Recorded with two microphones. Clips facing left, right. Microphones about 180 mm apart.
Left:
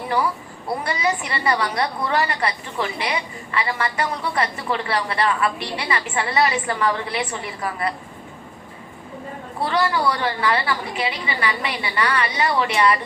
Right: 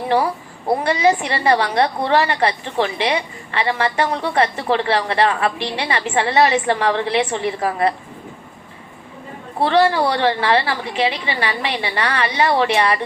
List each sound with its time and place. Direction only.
0.7 s a woman's voice: 30° right (ahead or behind)
9.6 s a woman's voice: 30° right (ahead or behind)